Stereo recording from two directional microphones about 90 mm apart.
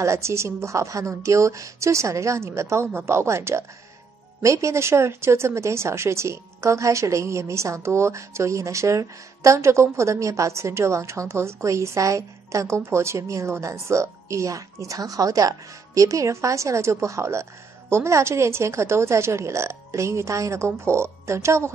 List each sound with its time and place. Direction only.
0.0 s speech: 30° right (ahead or behind)